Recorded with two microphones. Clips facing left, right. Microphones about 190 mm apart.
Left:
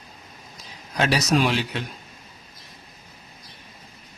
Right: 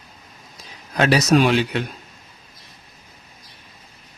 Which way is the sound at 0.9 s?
60° right (ahead or behind).